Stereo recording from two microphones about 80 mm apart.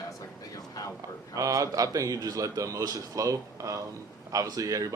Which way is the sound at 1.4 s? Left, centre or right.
Right.